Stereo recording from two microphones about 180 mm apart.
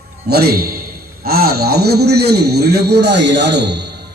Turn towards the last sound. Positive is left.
turn(degrees=-70)  # may be behind; listen again after turning